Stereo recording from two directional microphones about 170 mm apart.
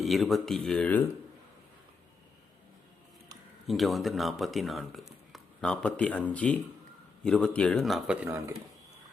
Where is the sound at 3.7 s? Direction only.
Centre (ahead or behind).